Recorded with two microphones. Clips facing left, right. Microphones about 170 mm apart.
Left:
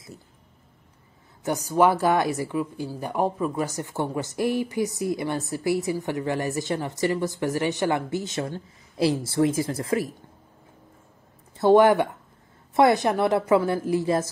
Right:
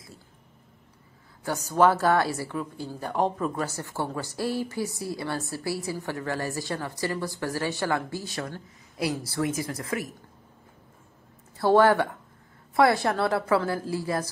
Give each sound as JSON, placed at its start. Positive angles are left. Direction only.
{"t": 1.4, "sound": "a woman's voice", "side_deg": 15}
{"t": 11.5, "sound": "speech", "side_deg": 20}